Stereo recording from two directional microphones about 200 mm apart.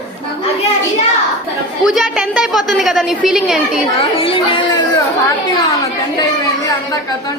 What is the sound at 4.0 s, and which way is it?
Speech, 25° left (ahead or behind).